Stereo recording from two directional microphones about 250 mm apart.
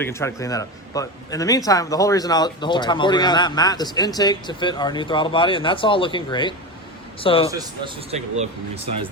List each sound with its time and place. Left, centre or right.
0.0 s a man's voice: centre
7.6 s speech: right